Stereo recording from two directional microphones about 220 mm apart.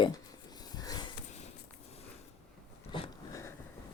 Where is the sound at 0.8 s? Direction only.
15° left (ahead or behind).